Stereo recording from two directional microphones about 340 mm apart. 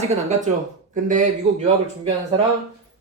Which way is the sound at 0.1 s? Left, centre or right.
Right.